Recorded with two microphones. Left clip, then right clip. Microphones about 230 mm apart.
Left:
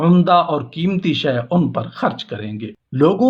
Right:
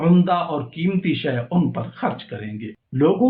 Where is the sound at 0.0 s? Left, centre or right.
Left.